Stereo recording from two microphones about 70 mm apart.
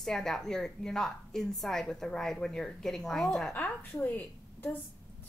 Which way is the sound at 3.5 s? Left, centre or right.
Left.